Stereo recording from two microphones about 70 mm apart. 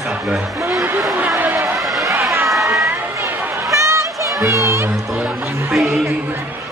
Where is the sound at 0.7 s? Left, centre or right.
Right.